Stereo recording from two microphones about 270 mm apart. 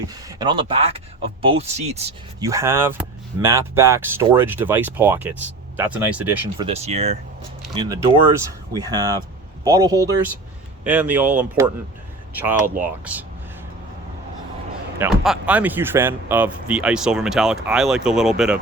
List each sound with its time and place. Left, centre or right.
0.1 s speech: centre
2.5 s speech: centre
6.7 s speech: right
7.8 s speech: centre
14.9 s speech: centre